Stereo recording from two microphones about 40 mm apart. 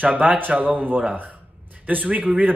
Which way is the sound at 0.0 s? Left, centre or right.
Right.